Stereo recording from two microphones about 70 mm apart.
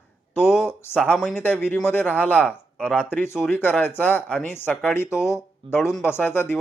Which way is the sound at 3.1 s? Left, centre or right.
Left.